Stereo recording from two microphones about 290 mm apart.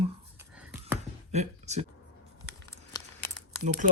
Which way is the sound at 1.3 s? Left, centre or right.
Right.